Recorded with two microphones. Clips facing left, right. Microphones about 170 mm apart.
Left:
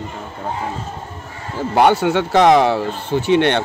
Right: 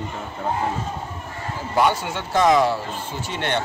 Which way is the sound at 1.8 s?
65° left (ahead or behind).